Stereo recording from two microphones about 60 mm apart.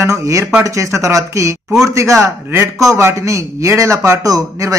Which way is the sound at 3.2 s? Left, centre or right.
Right.